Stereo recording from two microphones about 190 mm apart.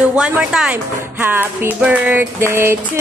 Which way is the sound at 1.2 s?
10° right (ahead or behind).